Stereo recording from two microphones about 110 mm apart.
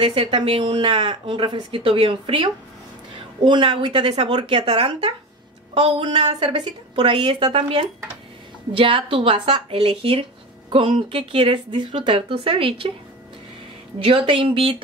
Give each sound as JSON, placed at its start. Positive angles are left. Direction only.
{"t": 0.0, "sound": "speech", "side_deg": -50}
{"t": 13.9, "sound": "speech", "side_deg": -55}